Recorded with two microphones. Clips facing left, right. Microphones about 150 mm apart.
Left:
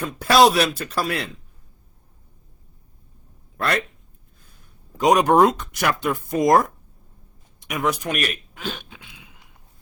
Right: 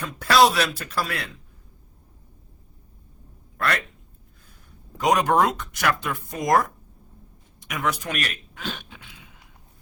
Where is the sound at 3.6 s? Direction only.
25° left (ahead or behind).